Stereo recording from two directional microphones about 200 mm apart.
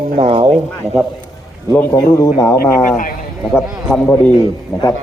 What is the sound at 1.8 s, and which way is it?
Speech, 15° left (ahead or behind).